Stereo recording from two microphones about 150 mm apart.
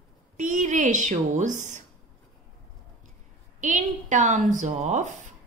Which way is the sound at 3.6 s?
55° right (ahead or behind).